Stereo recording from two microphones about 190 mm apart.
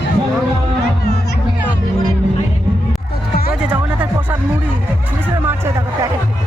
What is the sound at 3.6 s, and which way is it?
Music, 10° right (ahead or behind).